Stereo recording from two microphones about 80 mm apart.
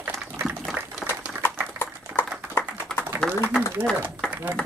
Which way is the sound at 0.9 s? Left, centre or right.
Centre.